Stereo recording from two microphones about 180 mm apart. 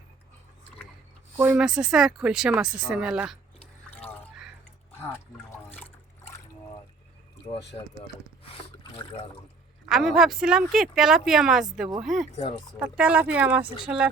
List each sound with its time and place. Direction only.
1.4 s speech: 10° right (ahead or behind)
4.9 s a sound: 15° left (ahead or behind)
5.6 s trickle: 10° left (ahead or behind)
7.7 s speech: 30° left (ahead or behind)
9.9 s speech: centre (ahead or behind)